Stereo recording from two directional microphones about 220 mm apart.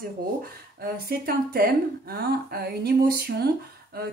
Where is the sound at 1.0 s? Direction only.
45° right (ahead or behind).